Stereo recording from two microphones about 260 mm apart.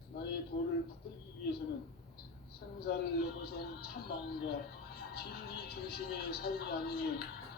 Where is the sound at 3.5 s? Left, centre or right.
Left.